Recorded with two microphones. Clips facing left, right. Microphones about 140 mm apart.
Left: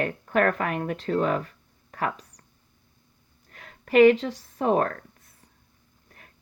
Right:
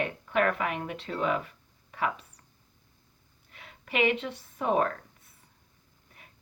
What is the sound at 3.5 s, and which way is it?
Speech, 45° left (ahead or behind).